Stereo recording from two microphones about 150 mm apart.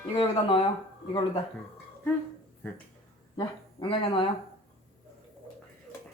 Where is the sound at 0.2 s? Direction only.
35° left (ahead or behind).